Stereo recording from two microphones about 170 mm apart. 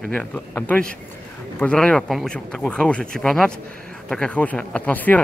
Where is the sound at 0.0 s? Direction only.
5° left (ahead or behind).